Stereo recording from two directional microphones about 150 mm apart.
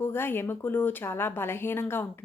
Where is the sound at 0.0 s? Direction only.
15° left (ahead or behind).